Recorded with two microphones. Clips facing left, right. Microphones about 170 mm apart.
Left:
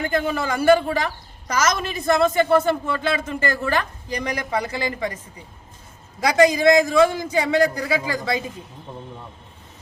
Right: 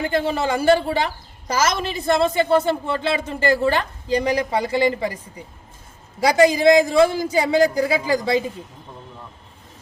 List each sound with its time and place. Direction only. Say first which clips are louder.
0.0 s speech: right 2 dB; 30° right (ahead or behind)
6.2 s a man's voice: right 1 dB; 30° right (ahead or behind)